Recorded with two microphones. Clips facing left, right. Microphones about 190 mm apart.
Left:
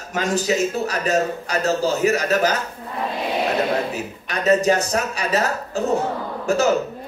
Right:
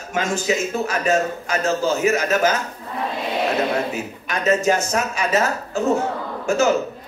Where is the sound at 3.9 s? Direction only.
35° left (ahead or behind).